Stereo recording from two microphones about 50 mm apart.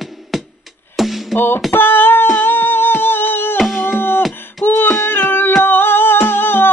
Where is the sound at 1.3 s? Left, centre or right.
Left.